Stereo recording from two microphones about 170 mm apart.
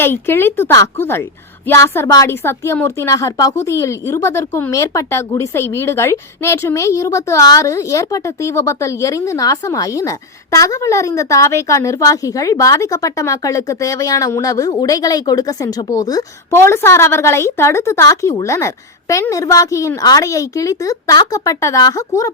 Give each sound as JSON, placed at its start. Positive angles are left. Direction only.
{"t": 0.0, "sound": "a woman's voice", "side_deg": 15}